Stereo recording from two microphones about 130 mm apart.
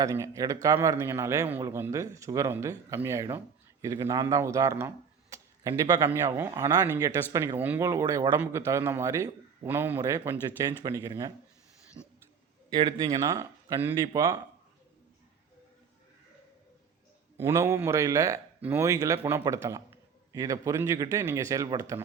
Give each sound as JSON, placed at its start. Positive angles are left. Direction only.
{"t": 0.0, "sound": "a man's voice", "side_deg": -25}
{"t": 10.0, "sound": "a man's voice", "side_deg": -25}
{"t": 17.3, "sound": "a man's voice", "side_deg": -20}